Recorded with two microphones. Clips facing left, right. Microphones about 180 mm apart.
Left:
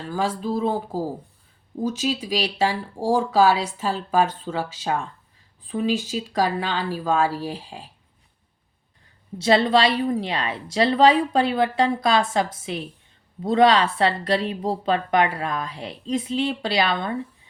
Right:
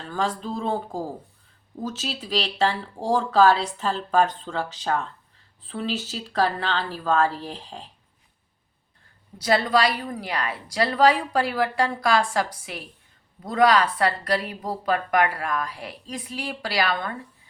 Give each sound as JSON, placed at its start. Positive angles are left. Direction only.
{"t": 0.1, "sound": "speech", "side_deg": 10}
{"t": 9.4, "sound": "a woman's voice", "side_deg": 25}